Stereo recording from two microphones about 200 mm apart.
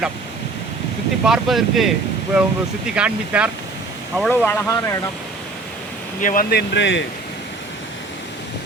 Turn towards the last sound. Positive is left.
turn(degrees=65)  # may be behind; listen again after turning